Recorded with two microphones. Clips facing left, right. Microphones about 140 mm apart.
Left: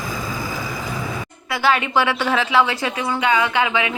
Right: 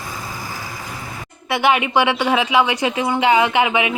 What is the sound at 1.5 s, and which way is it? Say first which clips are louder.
A woman's voice: right 2 dB; 20° right (ahead or behind).